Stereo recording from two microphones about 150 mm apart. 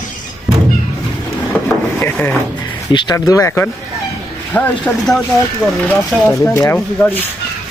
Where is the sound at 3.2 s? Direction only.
20° left (ahead or behind).